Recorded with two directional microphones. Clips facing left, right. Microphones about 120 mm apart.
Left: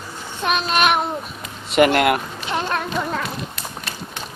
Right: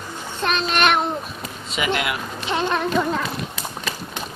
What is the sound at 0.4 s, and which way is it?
Child singing, 5° left (ahead or behind).